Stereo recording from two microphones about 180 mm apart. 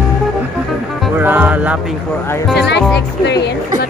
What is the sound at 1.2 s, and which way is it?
Music, 10° right (ahead or behind).